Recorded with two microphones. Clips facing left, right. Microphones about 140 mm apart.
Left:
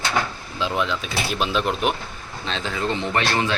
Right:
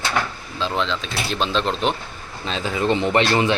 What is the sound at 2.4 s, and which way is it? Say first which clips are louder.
Speech: right 3 dB; 5° right (ahead or behind).